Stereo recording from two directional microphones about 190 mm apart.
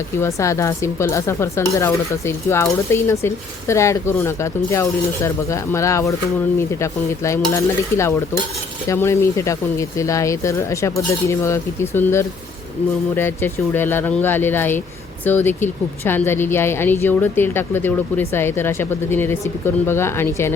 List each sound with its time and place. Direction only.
0.2 s a woman's voice: 15° left (ahead or behind)